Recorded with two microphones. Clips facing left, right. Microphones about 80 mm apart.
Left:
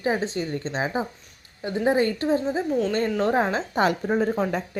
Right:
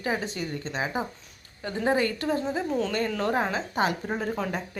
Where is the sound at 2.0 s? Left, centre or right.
Left.